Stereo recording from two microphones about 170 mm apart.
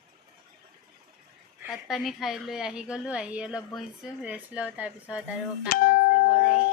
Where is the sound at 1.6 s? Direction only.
Centre (ahead or behind).